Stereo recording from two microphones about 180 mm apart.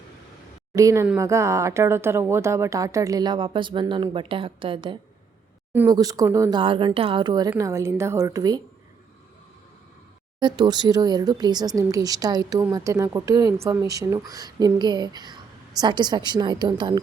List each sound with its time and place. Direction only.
0.7 s speech: 20° right (ahead or behind)
5.7 s a woman's voice: 15° right (ahead or behind)
10.4 s a woman's voice: 25° right (ahead or behind)